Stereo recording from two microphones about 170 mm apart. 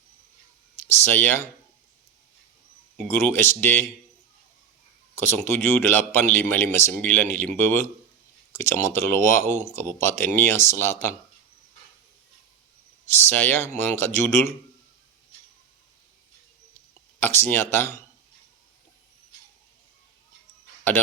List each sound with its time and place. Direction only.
1.0 s speech: 10° left (ahead or behind)
3.1 s speech: 10° left (ahead or behind)
5.1 s speech: 15° left (ahead or behind)
13.2 s speech: 10° left (ahead or behind)
17.2 s speech: 15° left (ahead or behind)